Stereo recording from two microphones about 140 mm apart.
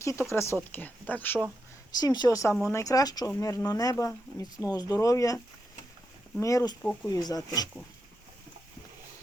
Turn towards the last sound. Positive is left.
turn(degrees=25)  # may be behind; listen again after turning